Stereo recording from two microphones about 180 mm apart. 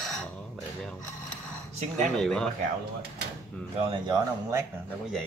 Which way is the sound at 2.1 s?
5° left (ahead or behind).